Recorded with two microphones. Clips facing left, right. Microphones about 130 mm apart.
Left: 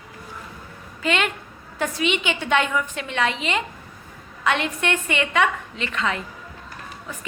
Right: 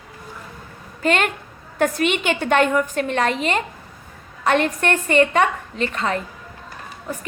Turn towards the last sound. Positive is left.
turn(degrees=-40)  # may be behind; listen again after turning